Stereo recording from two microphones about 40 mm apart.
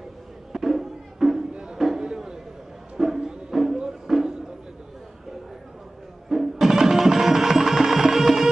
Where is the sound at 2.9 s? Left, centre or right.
Centre.